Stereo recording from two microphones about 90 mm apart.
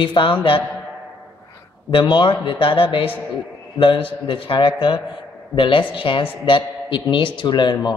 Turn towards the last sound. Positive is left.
turn(degrees=55)  # may be behind; listen again after turning